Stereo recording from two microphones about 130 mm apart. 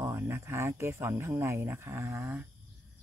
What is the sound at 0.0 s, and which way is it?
Speech, 20° right (ahead or behind).